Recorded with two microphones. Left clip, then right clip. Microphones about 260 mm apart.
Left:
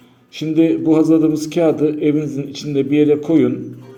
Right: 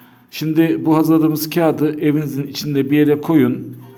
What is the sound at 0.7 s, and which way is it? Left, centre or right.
A man's voice, right.